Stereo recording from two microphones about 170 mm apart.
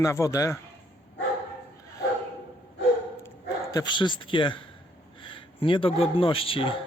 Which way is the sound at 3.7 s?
25° left (ahead or behind).